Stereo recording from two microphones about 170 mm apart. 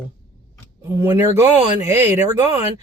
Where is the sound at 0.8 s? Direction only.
15° right (ahead or behind).